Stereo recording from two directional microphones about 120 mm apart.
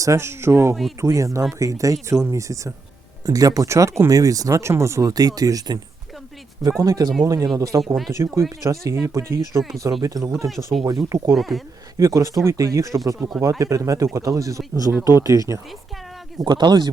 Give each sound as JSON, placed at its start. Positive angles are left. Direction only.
{"t": 0.0, "sound": "speech", "side_deg": -25}
{"t": 11.3, "sound": "speech", "side_deg": 0}
{"t": 11.9, "sound": "speech", "side_deg": -25}
{"t": 13.1, "sound": "speech", "side_deg": -10}
{"t": 13.4, "sound": "speech", "side_deg": -25}
{"t": 16.4, "sound": "speech", "side_deg": -35}